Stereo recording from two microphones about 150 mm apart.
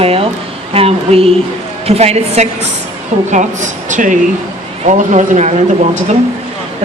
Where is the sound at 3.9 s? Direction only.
60° right (ahead or behind).